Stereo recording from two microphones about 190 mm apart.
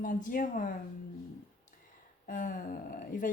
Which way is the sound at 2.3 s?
45° left (ahead or behind).